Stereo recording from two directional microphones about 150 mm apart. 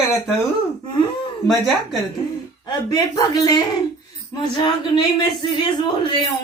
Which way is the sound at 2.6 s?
25° left (ahead or behind).